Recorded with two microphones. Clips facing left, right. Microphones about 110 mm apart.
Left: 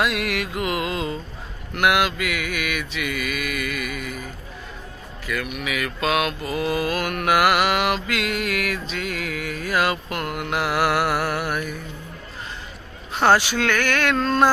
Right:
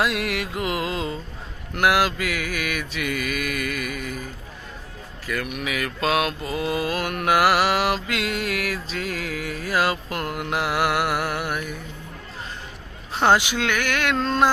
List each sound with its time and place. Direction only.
0.0 s music: 30° right (ahead or behind)
1.7 s mantra: 35° right (ahead or behind)
5.2 s mantra: 40° right (ahead or behind); by 11.6 s 15° right (ahead or behind)
13.1 s a sound: 20° right (ahead or behind)